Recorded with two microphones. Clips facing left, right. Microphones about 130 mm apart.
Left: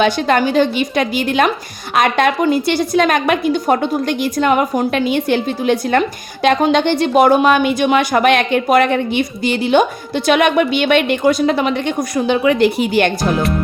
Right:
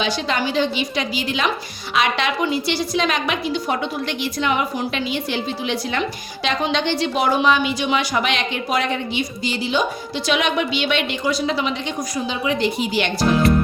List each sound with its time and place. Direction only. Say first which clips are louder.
0.0 s a woman's voice: left 8 dB; 50° left (ahead or behind)